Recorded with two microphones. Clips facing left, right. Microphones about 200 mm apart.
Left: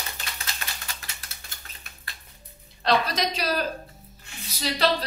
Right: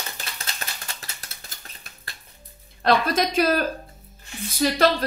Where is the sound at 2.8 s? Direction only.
50° right (ahead or behind).